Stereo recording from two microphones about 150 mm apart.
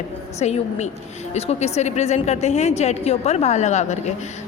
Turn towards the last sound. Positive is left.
turn(degrees=50)  # may be behind; listen again after turning